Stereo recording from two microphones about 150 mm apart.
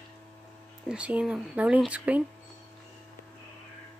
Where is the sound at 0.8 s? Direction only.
10° right (ahead or behind).